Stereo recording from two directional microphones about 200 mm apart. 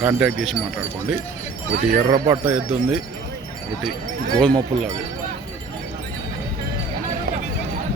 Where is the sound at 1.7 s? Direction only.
35° right (ahead or behind).